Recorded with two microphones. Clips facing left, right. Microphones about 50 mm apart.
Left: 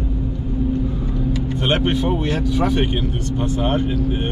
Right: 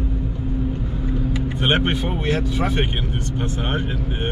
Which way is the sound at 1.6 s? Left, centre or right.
Centre.